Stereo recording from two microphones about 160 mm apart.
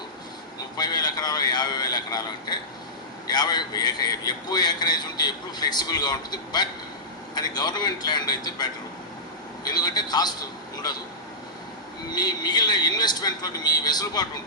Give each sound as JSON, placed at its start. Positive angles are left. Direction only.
{"t": 0.8, "sound": "a man's voice", "side_deg": 25}
{"t": 12.1, "sound": "a man's voice", "side_deg": 25}